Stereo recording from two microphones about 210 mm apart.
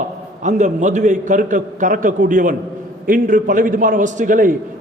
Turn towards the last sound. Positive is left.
turn(degrees=-40)  # may be behind; listen again after turning